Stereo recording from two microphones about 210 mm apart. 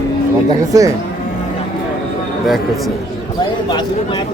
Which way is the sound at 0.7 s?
15° right (ahead or behind).